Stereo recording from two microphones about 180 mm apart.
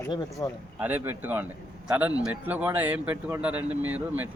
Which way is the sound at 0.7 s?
10° right (ahead or behind).